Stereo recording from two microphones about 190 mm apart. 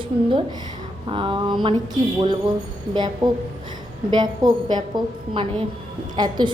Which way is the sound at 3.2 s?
20° right (ahead or behind).